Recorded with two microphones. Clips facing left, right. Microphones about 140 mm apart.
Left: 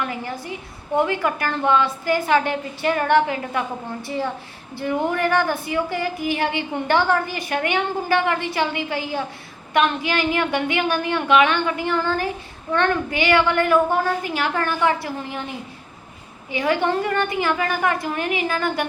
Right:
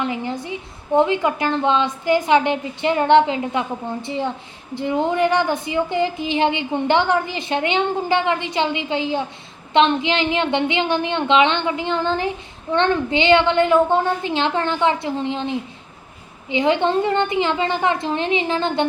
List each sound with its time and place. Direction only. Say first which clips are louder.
0.0 s a woman's voice: right 4 dB; 20° right (ahead or behind)